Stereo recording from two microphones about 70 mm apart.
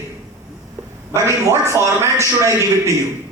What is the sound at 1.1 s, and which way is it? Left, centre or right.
A man's voice, right.